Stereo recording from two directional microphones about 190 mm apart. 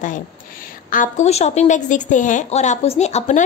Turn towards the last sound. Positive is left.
turn(degrees=35)  # may be behind; listen again after turning